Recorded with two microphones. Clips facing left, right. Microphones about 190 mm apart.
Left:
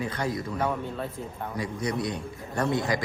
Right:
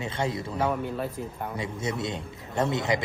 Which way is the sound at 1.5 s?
25° right (ahead or behind).